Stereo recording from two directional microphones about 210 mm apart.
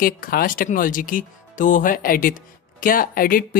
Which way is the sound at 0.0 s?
45° left (ahead or behind).